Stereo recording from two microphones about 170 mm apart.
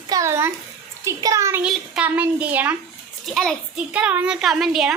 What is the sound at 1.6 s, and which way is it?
A child's voice, 5° right (ahead or behind).